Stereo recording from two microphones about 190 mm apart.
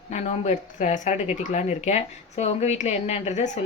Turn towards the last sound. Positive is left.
turn(degrees=35)  # may be behind; listen again after turning